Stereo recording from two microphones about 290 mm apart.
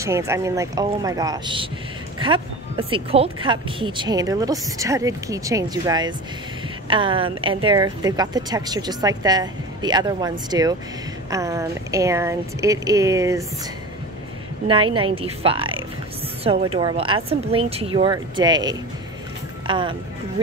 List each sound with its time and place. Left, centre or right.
0.0 s speech: centre
14.7 s speech: centre